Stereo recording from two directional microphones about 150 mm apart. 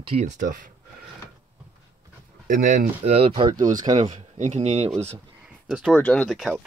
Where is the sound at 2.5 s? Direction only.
60° right (ahead or behind).